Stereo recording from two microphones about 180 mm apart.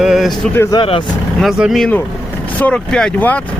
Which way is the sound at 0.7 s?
20° left (ahead or behind).